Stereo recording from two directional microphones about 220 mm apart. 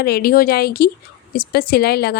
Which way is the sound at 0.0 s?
45° left (ahead or behind).